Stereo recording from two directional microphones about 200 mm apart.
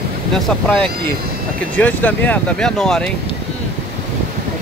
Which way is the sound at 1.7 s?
10° left (ahead or behind).